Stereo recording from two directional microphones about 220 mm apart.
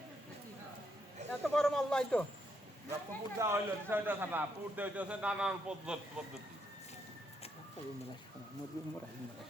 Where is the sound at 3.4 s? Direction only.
10° right (ahead or behind).